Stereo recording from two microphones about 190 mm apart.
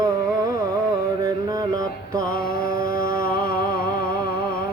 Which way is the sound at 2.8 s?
50° left (ahead or behind).